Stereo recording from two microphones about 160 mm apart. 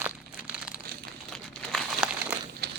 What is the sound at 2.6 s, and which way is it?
Crumpling, 90° right.